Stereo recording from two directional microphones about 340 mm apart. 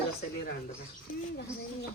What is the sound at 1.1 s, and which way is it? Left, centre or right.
Speech, left.